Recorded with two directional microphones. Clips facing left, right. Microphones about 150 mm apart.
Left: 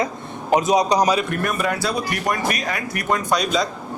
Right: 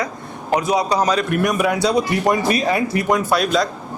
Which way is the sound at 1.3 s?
10° right (ahead or behind).